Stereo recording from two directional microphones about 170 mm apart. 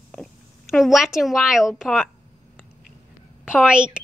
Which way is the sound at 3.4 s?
5° right (ahead or behind).